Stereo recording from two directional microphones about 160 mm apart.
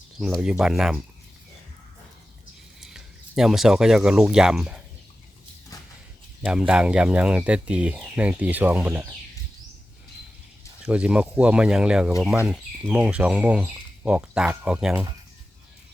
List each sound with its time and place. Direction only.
0.2 s speech: centre (ahead or behind)
2.8 s speech: centre (ahead or behind)
5.7 s a sound: 20° left (ahead or behind)
6.4 s speech: 5° right (ahead or behind)
10.8 s speech: 5° right (ahead or behind)